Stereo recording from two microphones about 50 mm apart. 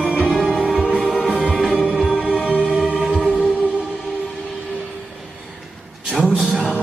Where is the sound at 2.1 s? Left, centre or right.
Right.